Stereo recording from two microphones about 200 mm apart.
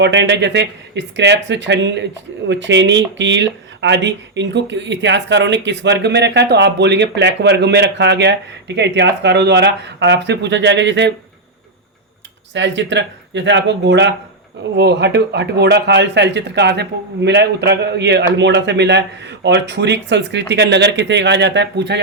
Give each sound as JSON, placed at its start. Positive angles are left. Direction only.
{"t": 0.0, "sound": "speech", "side_deg": -60}
{"t": 12.5, "sound": "speech", "side_deg": -65}